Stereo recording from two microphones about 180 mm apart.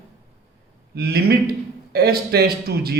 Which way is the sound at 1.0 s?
60° right (ahead or behind).